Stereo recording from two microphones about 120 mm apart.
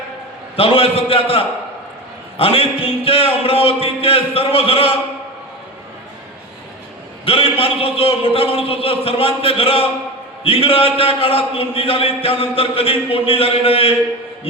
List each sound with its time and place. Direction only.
0.5 s speech: 50° left (ahead or behind)
7.3 s speech: 50° left (ahead or behind)